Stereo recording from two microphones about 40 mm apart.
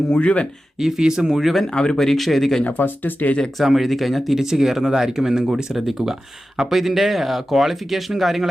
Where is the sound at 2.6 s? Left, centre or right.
Left.